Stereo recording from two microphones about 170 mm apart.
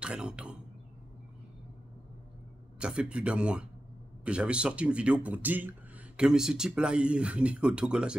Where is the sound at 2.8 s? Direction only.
5° right (ahead or behind).